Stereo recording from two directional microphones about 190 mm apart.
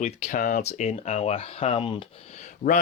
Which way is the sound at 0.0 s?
35° left (ahead or behind).